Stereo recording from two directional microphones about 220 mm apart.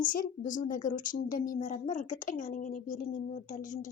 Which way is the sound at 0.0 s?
40° left (ahead or behind).